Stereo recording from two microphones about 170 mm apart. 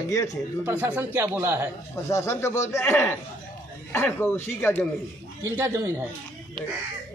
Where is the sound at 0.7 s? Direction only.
10° right (ahead or behind).